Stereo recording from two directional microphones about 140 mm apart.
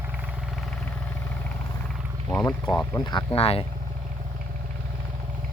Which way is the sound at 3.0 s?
35° left (ahead or behind).